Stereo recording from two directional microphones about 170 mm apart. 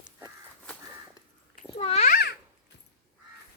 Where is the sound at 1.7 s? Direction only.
35° left (ahead or behind).